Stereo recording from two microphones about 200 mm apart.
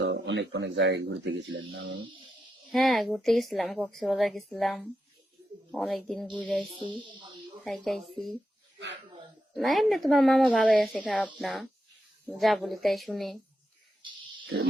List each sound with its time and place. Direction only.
0.0 s speech: 65° right (ahead or behind)
2.7 s a woman's voice: centre (ahead or behind)
6.7 s speech: 25° right (ahead or behind)
7.9 s a woman's voice: centre (ahead or behind)
9.5 s a woman's voice: centre (ahead or behind)